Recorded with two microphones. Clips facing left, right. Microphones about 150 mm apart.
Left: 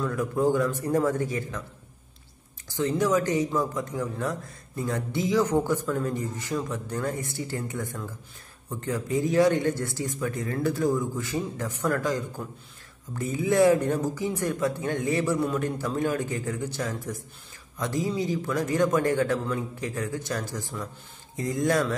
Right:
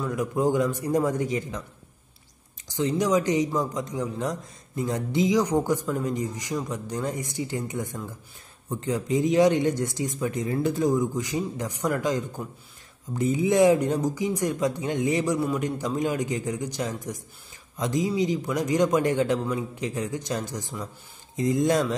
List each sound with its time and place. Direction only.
0.0 s a man's voice: 15° right (ahead or behind)
2.7 s a man's voice: 15° right (ahead or behind)